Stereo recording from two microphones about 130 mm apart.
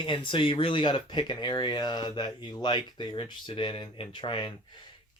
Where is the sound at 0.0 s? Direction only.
40° left (ahead or behind).